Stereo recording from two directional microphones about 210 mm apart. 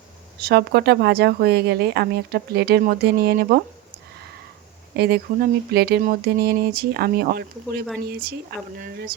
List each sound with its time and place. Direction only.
0.4 s speech: 50° right (ahead or behind)
4.9 s speech: 50° right (ahead or behind)